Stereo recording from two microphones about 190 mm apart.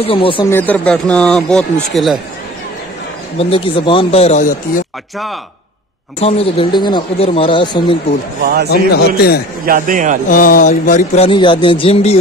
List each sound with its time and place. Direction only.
0.0 s speech: 30° left (ahead or behind)
0.5 s speech: 10° left (ahead or behind)
3.3 s speech: 30° left (ahead or behind)
6.1 s speech: 30° left (ahead or behind)
8.6 s a man's voice: 55° left (ahead or behind)
9.7 s a man's voice: 45° right (ahead or behind)
10.2 s a sound: 45° left (ahead or behind)
11.1 s speech: 25° left (ahead or behind)